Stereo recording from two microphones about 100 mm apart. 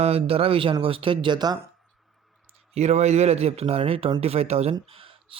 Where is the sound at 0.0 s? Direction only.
90° right; by 1.5 s 45° right (ahead or behind).